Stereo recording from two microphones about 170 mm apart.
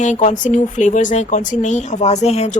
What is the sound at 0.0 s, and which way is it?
A woman's voice, 45° left (ahead or behind).